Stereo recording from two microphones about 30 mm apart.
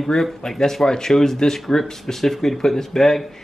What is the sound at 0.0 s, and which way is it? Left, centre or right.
Speech, centre.